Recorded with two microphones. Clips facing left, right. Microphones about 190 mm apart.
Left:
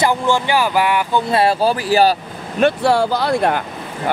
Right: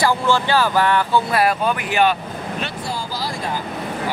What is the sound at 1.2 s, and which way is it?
Speech, 30° left (ahead or behind).